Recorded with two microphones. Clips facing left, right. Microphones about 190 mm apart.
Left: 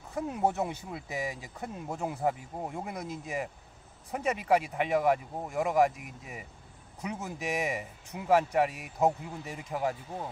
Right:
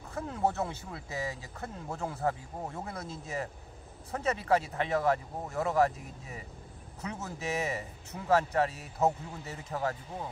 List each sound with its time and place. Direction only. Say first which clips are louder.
0.1 s speech: left 2 dB; 15° left (ahead or behind)